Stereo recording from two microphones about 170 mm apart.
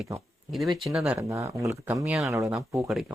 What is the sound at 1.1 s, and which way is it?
Speech, 20° right (ahead or behind).